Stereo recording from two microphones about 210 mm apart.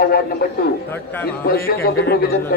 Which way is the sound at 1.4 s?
45° left (ahead or behind).